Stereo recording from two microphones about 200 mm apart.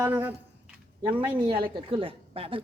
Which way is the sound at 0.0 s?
10° right (ahead or behind).